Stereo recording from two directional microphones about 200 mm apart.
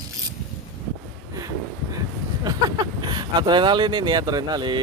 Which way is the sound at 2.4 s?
20° right (ahead or behind).